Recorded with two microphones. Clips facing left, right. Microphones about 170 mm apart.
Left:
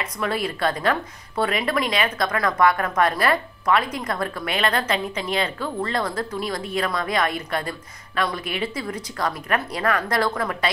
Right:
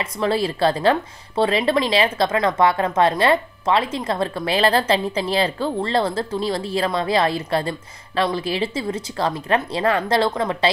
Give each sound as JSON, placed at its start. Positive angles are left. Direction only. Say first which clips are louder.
{"t": 0.0, "sound": "speech", "louder": "right 5 dB", "side_deg": -30}